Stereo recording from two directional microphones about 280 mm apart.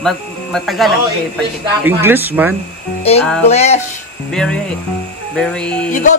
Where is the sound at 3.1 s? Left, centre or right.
Left.